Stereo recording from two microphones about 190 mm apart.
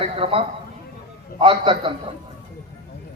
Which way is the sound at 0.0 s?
30° right (ahead or behind).